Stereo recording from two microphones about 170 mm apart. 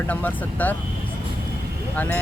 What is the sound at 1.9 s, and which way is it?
Speech, 10° left (ahead or behind).